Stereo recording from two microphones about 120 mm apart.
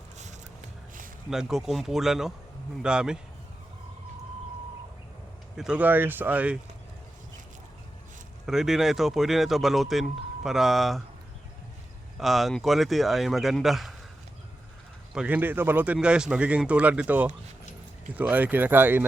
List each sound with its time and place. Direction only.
1.3 s speech: 5° right (ahead or behind)
5.5 s speech: 10° right (ahead or behind)
8.4 s speech: 5° right (ahead or behind)
12.1 s speech: centre (ahead or behind)
15.1 s speech: 10° right (ahead or behind)